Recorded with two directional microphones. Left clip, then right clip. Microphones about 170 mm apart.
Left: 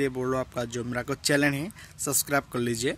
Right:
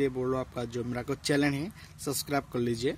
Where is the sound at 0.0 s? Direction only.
5° left (ahead or behind).